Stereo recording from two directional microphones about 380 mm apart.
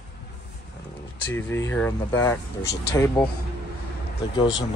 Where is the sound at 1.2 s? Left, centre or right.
Centre.